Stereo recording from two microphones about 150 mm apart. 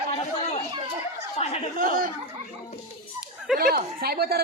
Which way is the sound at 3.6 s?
85° right.